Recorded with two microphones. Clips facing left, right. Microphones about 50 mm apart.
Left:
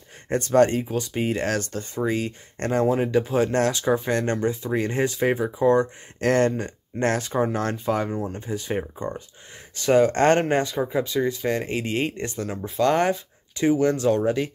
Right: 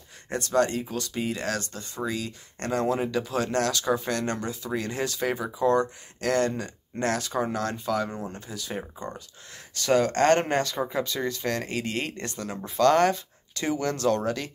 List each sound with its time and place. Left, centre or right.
0.3 s speech: left
0.8 s speech: centre
1.1 s speech: left
6.2 s speech: left
8.1 s speech: centre
8.4 s speech: left
12.4 s speech: centre